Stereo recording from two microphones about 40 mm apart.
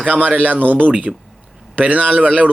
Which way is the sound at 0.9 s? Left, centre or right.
Right.